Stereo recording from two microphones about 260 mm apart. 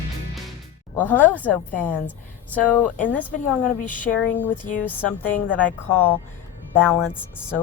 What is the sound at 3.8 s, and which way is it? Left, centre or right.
Speech, left.